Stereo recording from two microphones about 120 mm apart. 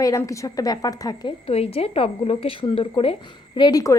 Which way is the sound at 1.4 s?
55° left (ahead or behind).